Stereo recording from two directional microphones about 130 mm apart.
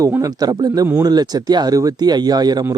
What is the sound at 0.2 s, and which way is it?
A man's voice, 30° right (ahead or behind).